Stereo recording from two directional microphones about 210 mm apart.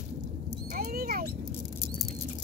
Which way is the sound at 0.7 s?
45° right (ahead or behind).